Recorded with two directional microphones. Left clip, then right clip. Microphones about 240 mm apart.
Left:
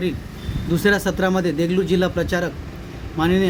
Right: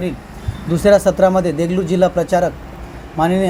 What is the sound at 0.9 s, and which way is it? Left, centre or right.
Speech, centre.